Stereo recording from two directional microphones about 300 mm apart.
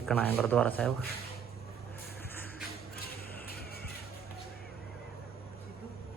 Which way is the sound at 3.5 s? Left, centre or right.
Left.